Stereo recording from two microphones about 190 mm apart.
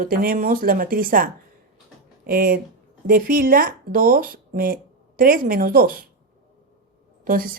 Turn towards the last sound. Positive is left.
turn(degrees=-50)  # may be behind; listen again after turning